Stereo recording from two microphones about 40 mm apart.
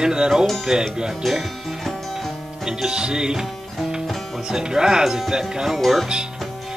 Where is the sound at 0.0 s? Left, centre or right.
Centre.